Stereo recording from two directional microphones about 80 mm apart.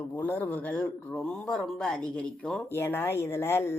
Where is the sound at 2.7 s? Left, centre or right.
Left.